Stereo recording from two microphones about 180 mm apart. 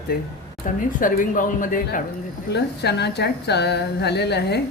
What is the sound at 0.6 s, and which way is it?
Speech, 50° left (ahead or behind).